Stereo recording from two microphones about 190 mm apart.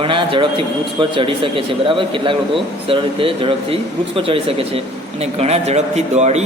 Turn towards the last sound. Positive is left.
turn(degrees=-35)  # may be behind; listen again after turning